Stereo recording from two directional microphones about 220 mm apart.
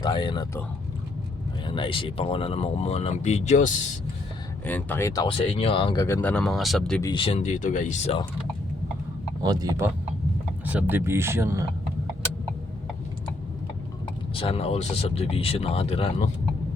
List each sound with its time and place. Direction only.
0.0 s speech: 20° left (ahead or behind)
1.6 s speech: 20° left (ahead or behind)
4.6 s speech: 10° left (ahead or behind)
7.0 s speech: 20° left (ahead or behind)
9.4 s speech: 15° right (ahead or behind)
14.3 s speech: 25° left (ahead or behind)